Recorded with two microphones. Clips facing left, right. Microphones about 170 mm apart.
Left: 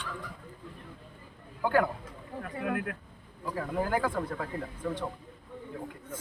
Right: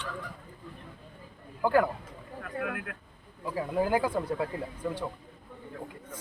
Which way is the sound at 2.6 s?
25° left (ahead or behind).